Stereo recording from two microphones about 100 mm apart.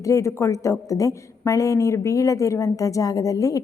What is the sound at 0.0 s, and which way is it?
A woman's voice, 30° left (ahead or behind).